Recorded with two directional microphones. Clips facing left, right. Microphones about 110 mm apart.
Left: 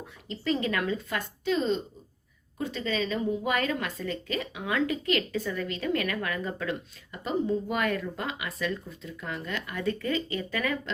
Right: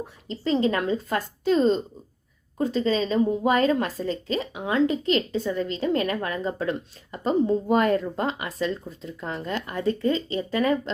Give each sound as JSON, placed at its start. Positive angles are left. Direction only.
{"t": 0.3, "sound": "a woman's voice", "side_deg": -30}